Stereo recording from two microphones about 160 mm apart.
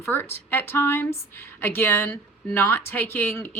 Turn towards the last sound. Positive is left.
turn(degrees=10)  # may be behind; listen again after turning